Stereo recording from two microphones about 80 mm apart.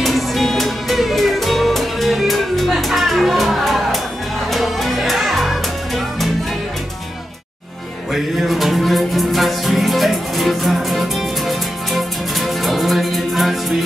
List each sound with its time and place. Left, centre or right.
0.0 s music: centre
8.1 s music: centre